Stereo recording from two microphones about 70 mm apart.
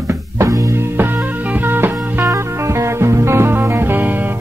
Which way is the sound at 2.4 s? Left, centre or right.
Right.